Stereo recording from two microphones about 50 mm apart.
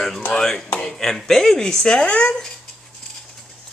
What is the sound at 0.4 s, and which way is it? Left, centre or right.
Speech, centre.